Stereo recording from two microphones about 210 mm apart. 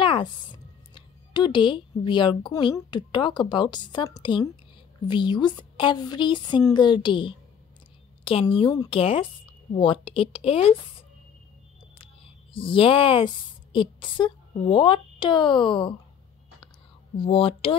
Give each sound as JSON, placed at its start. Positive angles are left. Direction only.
{"t": 0.0, "sound": "a woman's voice", "side_deg": 25}
{"t": 12.5, "sound": "a woman's voice", "side_deg": 25}
{"t": 17.2, "sound": "a woman's voice", "side_deg": 25}